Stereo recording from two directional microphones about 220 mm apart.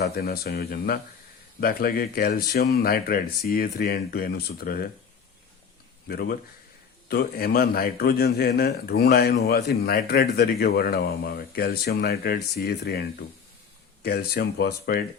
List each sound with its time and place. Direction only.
0.0 s speech: 45° left (ahead or behind)
6.1 s speech: 45° left (ahead or behind)